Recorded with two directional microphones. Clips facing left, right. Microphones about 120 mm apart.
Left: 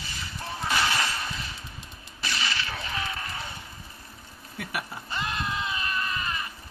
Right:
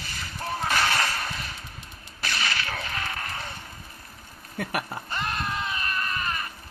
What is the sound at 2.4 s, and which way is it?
Music, 50° right (ahead or behind).